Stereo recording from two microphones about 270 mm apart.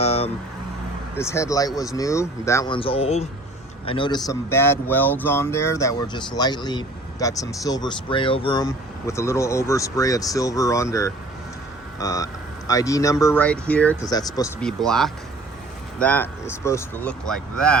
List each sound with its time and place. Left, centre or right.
0.0 s vehicle: left
1.1 s speech: centre
14.6 s speech: centre